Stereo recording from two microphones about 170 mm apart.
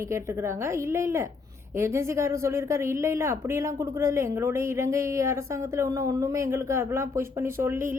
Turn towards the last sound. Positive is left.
turn(degrees=-15)  # may be behind; listen again after turning